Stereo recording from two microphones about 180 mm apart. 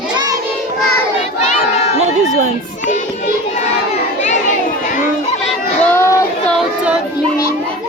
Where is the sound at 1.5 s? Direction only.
40° left (ahead or behind).